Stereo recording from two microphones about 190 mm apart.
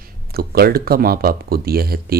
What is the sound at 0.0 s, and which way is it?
Speech, 55° right (ahead or behind).